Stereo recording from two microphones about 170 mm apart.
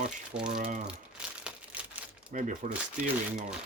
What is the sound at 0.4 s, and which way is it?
Speech, 50° right (ahead or behind).